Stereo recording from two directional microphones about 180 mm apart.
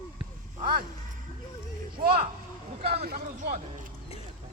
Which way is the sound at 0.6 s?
55° right (ahead or behind).